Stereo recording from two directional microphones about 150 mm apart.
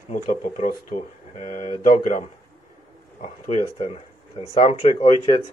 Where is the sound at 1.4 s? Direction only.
55° left (ahead or behind).